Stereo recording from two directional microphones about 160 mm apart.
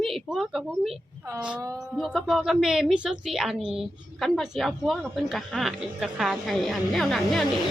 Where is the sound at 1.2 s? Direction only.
20° right (ahead or behind).